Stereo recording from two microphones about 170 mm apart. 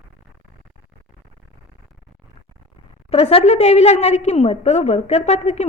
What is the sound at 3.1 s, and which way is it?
A woman's voice, 35° left (ahead or behind).